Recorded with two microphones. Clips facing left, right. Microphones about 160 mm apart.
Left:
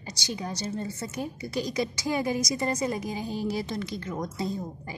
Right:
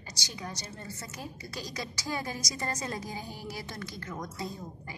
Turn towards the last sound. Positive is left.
turn(degrees=25)  # may be behind; listen again after turning